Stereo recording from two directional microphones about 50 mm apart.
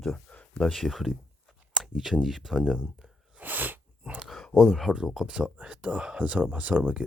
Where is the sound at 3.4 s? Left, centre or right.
Right.